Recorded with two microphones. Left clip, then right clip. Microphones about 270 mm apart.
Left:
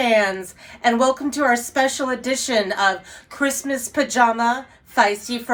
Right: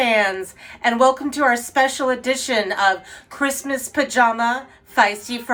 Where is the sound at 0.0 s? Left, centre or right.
Centre.